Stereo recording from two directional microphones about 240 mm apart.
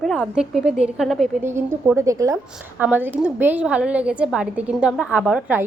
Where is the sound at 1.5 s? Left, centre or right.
Centre.